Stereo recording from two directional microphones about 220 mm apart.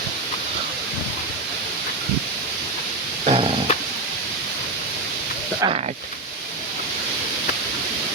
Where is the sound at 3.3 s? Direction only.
25° right (ahead or behind).